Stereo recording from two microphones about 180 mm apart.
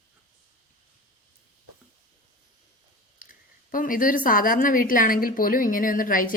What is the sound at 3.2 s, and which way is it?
A woman's voice, 50° left (ahead or behind).